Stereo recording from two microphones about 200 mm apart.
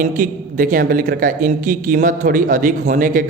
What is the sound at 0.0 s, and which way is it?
A man's voice, 40° right (ahead or behind).